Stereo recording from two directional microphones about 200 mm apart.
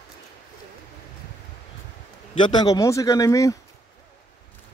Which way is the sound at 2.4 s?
20° left (ahead or behind).